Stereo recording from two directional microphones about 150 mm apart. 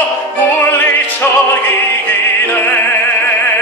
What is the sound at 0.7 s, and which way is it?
Opera, 10° left (ahead or behind).